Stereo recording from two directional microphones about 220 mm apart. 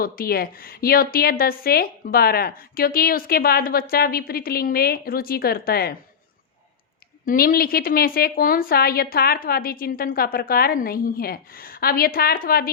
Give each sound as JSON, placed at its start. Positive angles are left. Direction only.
{"t": 0.0, "sound": "a woman's voice", "side_deg": 40}
{"t": 7.3, "sound": "a woman's voice", "side_deg": 40}